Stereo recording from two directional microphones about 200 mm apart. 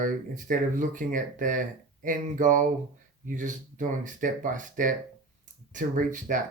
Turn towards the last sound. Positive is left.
turn(degrees=-40)  # may be behind; listen again after turning